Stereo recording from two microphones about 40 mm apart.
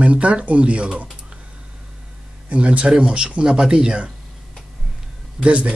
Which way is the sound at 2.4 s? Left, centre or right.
Right.